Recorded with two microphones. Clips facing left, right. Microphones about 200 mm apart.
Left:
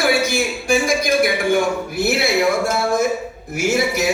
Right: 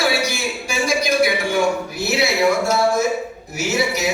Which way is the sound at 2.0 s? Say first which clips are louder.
Left 3 dB; 55° left (ahead or behind).